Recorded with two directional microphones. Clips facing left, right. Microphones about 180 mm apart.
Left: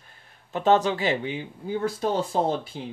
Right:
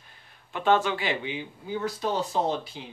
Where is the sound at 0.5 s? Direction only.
40° left (ahead or behind).